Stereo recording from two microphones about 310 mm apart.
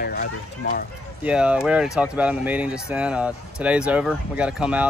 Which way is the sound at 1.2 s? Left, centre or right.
Centre.